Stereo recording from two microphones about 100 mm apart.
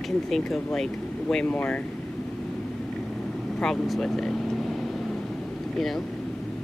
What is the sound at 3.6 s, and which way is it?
Vehicle, 5° left (ahead or behind).